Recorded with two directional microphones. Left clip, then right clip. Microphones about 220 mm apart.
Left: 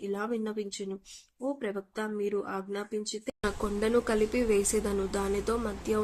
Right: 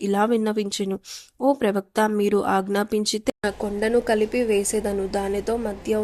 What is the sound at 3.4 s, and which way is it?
A woman's voice, 5° right (ahead or behind).